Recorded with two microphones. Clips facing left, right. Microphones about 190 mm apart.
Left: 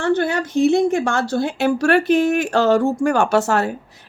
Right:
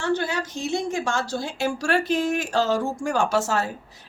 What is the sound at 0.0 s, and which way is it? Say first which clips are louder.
Speech: left 6 dB; 55° left (ahead or behind).